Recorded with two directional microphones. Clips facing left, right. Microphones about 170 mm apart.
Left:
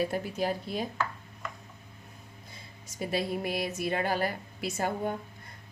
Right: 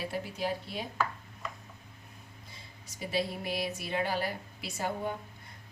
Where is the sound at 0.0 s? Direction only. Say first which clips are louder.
Left 5 dB; 45° left (ahead or behind).